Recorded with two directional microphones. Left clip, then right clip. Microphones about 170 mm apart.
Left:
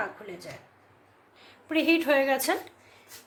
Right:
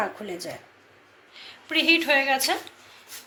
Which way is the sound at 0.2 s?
45° right (ahead or behind).